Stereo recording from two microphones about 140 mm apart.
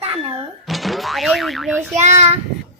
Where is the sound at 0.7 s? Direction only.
Centre (ahead or behind).